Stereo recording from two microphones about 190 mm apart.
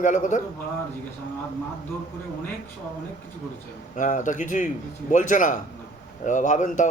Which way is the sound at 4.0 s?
40° left (ahead or behind).